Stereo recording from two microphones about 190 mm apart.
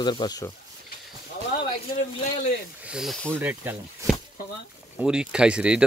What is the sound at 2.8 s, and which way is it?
Speech, centre (ahead or behind).